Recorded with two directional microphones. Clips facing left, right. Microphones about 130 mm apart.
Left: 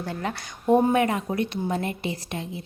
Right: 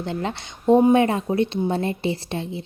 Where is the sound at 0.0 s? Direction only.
25° right (ahead or behind).